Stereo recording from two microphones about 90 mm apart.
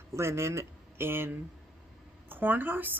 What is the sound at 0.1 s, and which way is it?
Speech, 30° right (ahead or behind).